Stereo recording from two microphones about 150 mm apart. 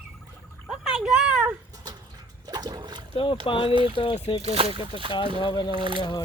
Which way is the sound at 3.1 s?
35° left (ahead or behind).